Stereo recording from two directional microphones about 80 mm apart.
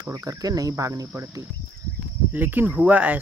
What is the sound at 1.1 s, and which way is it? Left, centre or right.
Speech, right.